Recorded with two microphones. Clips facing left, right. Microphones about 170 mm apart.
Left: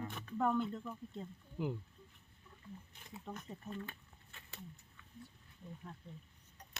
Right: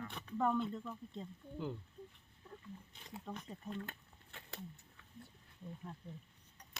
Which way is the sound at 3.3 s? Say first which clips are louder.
Even; centre (ahead or behind).